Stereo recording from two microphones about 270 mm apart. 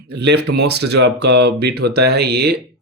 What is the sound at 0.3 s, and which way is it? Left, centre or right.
Speech, right.